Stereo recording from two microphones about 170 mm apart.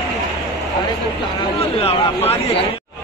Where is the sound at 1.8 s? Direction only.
35° left (ahead or behind).